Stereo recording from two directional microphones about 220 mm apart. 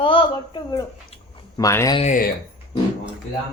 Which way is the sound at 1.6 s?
15° left (ahead or behind).